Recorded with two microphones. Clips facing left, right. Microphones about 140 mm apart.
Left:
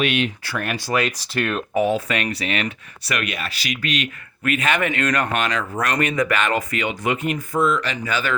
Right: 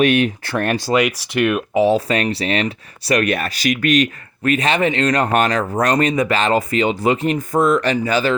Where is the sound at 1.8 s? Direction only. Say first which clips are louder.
Right 5 dB; 35° right (ahead or behind).